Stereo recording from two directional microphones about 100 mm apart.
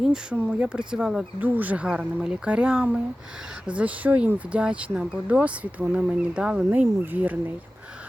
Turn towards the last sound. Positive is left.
turn(degrees=-15)  # may be behind; listen again after turning